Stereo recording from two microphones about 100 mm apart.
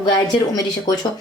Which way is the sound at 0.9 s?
45° left (ahead or behind).